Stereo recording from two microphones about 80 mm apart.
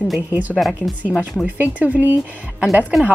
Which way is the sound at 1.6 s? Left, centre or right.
Centre.